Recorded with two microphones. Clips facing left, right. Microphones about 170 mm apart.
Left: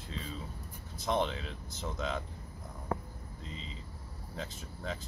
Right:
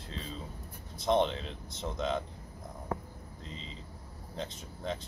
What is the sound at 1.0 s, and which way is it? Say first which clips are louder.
Speech: right 4 dB; 30° right (ahead or behind).